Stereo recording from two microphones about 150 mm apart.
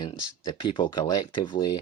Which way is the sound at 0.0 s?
30° left (ahead or behind).